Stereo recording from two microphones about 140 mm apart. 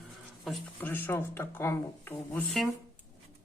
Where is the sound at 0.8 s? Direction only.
15° left (ahead or behind).